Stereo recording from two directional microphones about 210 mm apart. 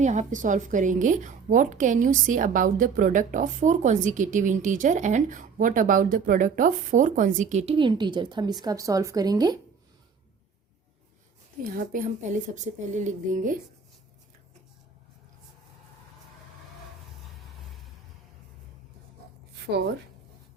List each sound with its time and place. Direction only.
0.0 s a woman's voice: 35° right (ahead or behind); by 9.6 s 20° right (ahead or behind)
11.7 s a woman's voice: 40° right (ahead or behind)